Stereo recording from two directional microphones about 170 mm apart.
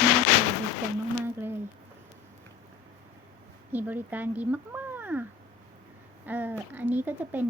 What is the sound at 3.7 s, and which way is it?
Speech, 10° right (ahead or behind).